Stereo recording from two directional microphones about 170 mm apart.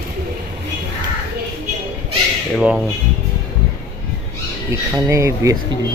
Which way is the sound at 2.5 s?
5° right (ahead or behind).